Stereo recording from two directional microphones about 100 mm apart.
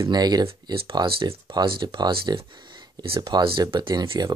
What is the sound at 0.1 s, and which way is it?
Speech, 45° right (ahead or behind).